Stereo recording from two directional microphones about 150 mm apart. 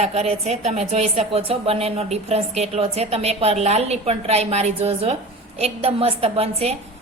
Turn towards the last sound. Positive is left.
turn(degrees=-45)  # may be behind; listen again after turning